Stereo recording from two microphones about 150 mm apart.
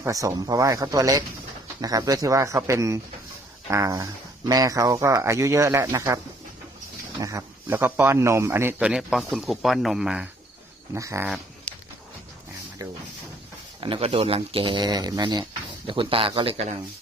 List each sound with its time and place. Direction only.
0.0 s speech: 20° right (ahead or behind)
7.2 s speech: 20° right (ahead or behind); by 10.2 s 5° right (ahead or behind)
10.9 s speech: 20° right (ahead or behind)
12.8 s speech: 25° right (ahead or behind)
13.8 s speech: 35° right (ahead or behind)